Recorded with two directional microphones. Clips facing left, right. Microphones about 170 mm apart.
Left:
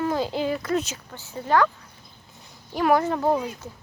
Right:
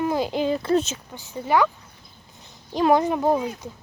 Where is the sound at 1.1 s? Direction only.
15° right (ahead or behind).